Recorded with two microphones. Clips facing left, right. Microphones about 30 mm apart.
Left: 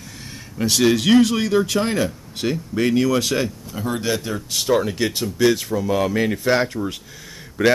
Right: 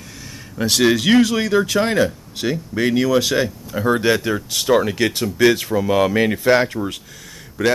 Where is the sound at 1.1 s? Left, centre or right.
Right.